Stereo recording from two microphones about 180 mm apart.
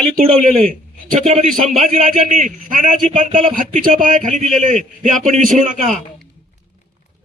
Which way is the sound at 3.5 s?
50° right (ahead or behind).